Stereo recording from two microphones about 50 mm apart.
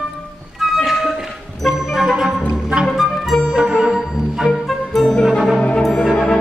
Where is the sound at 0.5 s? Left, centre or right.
Centre.